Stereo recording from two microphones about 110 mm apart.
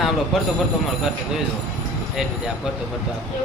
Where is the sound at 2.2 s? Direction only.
5° right (ahead or behind).